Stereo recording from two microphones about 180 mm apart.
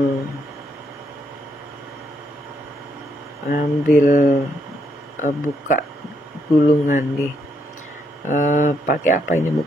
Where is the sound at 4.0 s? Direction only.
40° left (ahead or behind).